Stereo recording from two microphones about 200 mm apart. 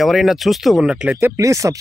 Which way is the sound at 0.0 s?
Centre (ahead or behind).